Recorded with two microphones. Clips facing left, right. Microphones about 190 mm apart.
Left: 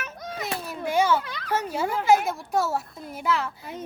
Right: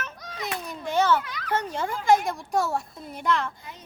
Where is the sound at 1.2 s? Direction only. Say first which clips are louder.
Left 1 dB; 30° left (ahead or behind).